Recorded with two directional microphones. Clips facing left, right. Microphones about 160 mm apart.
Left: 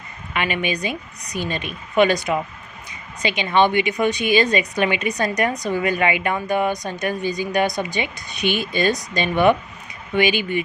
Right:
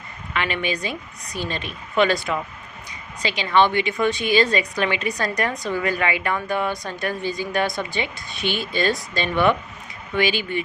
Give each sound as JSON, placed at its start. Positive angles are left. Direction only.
{"t": 0.3, "sound": "a woman's voice", "side_deg": 15}